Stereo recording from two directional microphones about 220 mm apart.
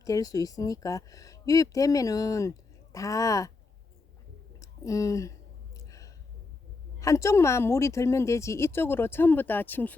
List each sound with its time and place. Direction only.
0.0 s speech: 15° left (ahead or behind)
4.6 s speech: 15° left (ahead or behind)
5.7 s a sound: 15° left (ahead or behind)
7.0 s speech: 15° left (ahead or behind)